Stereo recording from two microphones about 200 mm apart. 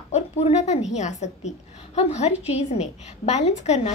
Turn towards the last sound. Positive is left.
turn(degrees=35)  # may be behind; listen again after turning